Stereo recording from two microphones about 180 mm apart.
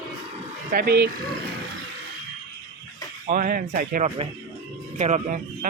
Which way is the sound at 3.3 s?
50° right (ahead or behind).